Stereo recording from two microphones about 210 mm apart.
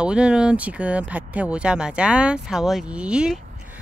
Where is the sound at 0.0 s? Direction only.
5° right (ahead or behind).